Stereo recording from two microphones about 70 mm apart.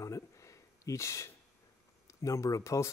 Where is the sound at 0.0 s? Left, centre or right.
Left.